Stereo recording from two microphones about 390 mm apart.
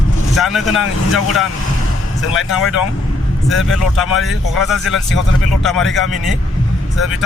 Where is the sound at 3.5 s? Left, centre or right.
Centre.